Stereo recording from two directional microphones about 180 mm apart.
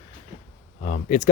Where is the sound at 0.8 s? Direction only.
45° left (ahead or behind).